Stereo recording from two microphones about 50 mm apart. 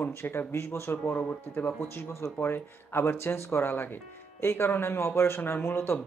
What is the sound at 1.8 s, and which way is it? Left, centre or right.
Speech, left.